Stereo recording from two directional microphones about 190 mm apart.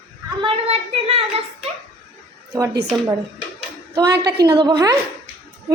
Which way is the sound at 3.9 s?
20° right (ahead or behind).